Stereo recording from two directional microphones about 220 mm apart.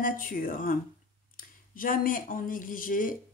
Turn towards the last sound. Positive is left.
turn(degrees=40)  # may be behind; listen again after turning